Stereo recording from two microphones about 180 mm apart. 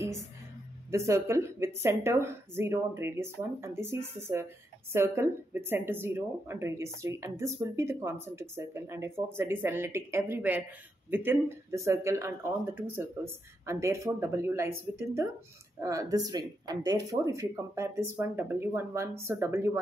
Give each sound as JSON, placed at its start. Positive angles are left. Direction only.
{"t": 0.9, "sound": "speech", "side_deg": -15}